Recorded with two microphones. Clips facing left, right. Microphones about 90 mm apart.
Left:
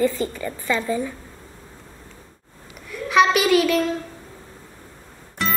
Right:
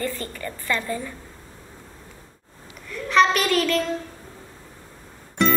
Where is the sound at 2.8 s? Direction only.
5° left (ahead or behind).